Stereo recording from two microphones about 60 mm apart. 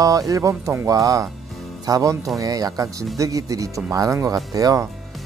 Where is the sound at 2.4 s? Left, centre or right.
Right.